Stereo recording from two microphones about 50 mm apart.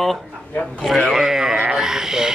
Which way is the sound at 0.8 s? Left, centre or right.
Centre.